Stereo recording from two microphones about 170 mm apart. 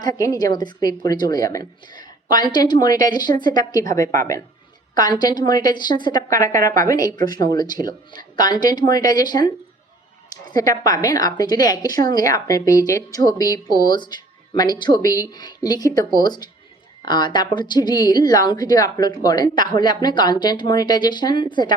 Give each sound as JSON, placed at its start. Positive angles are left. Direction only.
{"t": 0.0, "sound": "a woman's voice", "side_deg": 20}
{"t": 10.5, "sound": "a woman's voice", "side_deg": 20}